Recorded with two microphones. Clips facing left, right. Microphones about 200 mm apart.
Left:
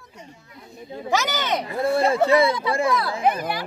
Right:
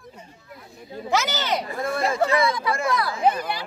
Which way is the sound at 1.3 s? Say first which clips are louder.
Left 1 dB; 20° left (ahead or behind).